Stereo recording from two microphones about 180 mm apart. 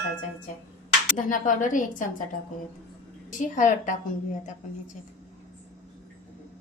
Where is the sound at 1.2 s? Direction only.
45° left (ahead or behind).